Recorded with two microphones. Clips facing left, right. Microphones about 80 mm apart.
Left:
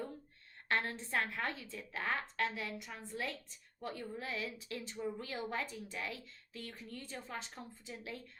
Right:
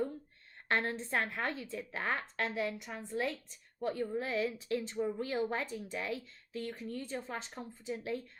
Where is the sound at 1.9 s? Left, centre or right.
Right.